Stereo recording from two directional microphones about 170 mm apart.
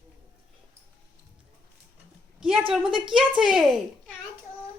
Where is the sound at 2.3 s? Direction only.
5° right (ahead or behind).